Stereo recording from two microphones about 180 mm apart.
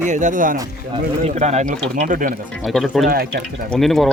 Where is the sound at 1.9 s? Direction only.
50° right (ahead or behind).